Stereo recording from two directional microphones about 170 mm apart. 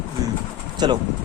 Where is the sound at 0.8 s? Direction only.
25° right (ahead or behind).